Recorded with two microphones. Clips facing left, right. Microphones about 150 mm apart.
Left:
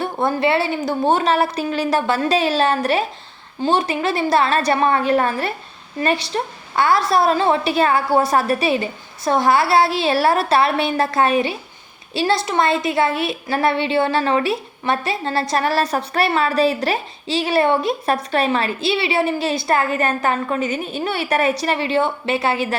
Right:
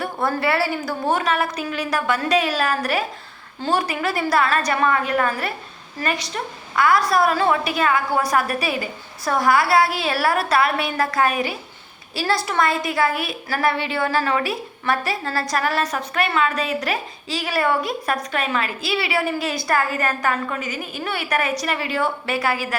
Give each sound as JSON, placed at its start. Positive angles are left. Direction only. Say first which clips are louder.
{"t": 0.0, "sound": "a woman's voice", "louder": "left 3 dB", "side_deg": 20}